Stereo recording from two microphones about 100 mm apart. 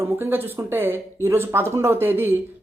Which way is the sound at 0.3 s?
20° right (ahead or behind).